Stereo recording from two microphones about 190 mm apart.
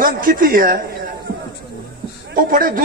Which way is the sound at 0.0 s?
45° right (ahead or behind).